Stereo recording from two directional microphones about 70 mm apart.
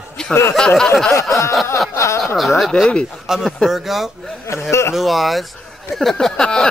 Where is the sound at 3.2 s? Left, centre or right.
Centre.